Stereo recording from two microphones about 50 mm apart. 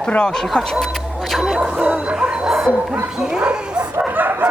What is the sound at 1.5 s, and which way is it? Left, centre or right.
Bow-wow, right.